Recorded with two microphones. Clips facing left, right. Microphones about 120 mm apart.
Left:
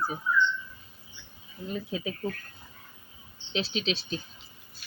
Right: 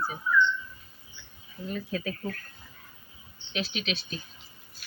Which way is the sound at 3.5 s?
30° left (ahead or behind).